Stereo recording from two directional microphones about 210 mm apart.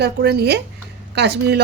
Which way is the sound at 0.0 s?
50° right (ahead or behind).